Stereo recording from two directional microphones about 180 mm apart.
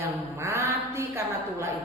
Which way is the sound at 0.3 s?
15° right (ahead or behind).